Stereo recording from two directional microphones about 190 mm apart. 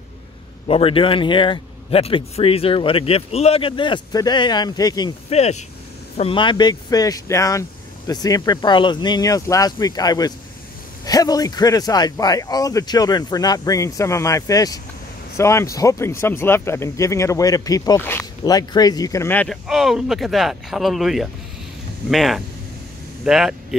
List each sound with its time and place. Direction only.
0.7 s speech: 30° left (ahead or behind)
5.3 s speech: 35° left (ahead or behind); by 23.8 s centre (ahead or behind)